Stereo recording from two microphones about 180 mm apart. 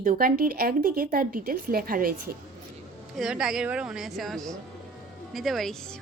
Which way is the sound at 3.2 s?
5° right (ahead or behind).